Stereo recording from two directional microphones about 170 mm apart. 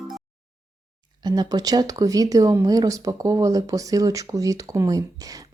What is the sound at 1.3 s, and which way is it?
Speech, 25° right (ahead or behind).